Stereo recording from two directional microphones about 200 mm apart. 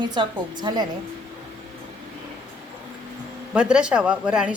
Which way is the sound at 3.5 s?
5° right (ahead or behind).